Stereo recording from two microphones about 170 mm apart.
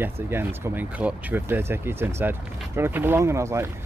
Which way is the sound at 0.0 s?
15° right (ahead or behind).